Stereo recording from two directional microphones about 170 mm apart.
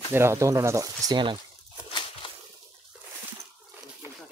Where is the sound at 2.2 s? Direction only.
30° left (ahead or behind).